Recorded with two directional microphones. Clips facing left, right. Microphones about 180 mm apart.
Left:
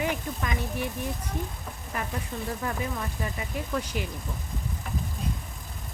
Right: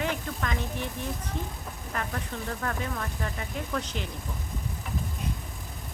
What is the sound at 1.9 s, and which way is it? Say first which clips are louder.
Speech: left 1 dB; 10° left (ahead or behind).